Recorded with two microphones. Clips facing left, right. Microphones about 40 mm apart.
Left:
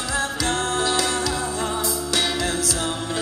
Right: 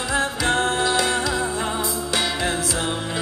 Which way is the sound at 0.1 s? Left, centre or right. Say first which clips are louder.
Right 3 dB; right.